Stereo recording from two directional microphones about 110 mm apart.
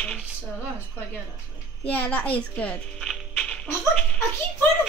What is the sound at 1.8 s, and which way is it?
A child's voice, 15° left (ahead or behind).